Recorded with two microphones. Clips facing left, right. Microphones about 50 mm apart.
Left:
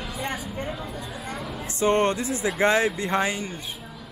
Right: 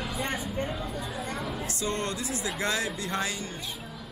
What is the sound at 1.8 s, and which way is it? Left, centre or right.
A man's voice, left.